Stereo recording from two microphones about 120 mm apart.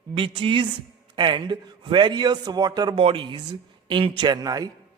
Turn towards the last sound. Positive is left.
turn(degrees=-30)  # may be behind; listen again after turning